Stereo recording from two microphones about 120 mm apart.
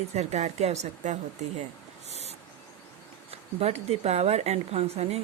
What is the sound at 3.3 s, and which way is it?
Speech, 60° right (ahead or behind).